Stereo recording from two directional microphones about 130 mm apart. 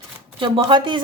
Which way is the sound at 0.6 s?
40° right (ahead or behind).